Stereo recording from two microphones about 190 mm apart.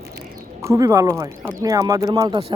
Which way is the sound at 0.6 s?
15° right (ahead or behind).